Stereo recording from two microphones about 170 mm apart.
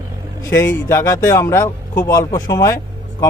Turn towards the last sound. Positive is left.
turn(degrees=20)  # may be behind; listen again after turning